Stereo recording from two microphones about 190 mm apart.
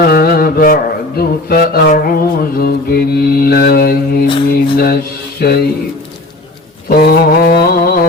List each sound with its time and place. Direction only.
0.0 s mantra: 55° left (ahead or behind)
6.8 s mantra: 50° left (ahead or behind)